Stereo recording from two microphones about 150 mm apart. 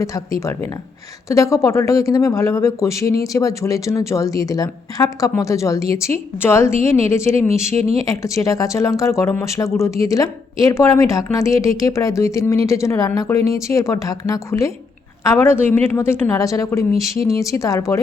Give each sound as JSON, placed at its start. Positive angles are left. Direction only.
{"t": 0.0, "sound": "a woman's voice", "side_deg": 20}
{"t": 7.8, "sound": "speech", "side_deg": -45}
{"t": 8.0, "sound": "a woman's voice", "side_deg": 20}